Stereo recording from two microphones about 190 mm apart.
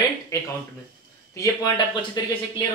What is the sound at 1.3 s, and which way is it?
Speech, 15° left (ahead or behind).